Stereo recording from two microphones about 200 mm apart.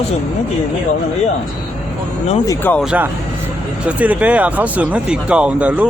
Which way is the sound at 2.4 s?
15° left (ahead or behind).